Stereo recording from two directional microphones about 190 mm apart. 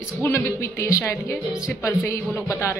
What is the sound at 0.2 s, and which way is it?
A woman's voice, 15° left (ahead or behind).